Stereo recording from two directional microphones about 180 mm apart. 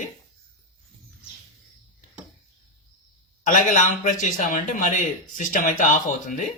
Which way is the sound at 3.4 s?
45° left (ahead or behind).